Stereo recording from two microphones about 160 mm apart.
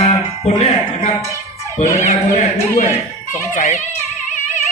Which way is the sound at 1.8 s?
50° left (ahead or behind).